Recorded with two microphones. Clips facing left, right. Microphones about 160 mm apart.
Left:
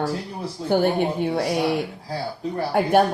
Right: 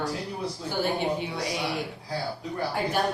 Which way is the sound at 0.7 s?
55° left (ahead or behind).